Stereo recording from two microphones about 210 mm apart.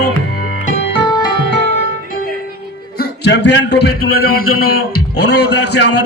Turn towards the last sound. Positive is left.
turn(degrees=55)  # may be behind; listen again after turning